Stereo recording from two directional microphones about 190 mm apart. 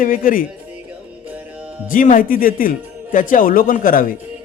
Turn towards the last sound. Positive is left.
turn(degrees=50)  # may be behind; listen again after turning